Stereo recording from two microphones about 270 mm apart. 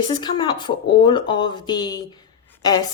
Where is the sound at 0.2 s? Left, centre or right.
Centre.